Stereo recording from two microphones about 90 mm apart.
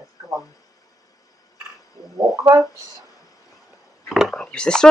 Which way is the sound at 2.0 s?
40° left (ahead or behind).